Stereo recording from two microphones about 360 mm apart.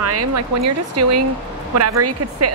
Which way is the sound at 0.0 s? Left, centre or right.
Right.